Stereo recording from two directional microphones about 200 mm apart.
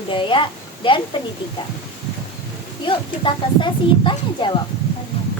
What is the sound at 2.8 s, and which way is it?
A woman's voice, 25° left (ahead or behind).